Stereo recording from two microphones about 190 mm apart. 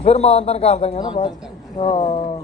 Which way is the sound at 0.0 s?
35° left (ahead or behind).